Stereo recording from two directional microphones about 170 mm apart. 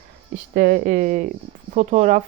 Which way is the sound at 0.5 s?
60° right (ahead or behind).